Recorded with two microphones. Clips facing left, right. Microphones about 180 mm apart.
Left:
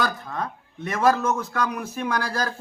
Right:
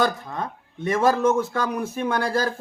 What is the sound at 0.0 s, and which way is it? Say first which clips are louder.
A man's voice: right 3 dB; 25° right (ahead or behind).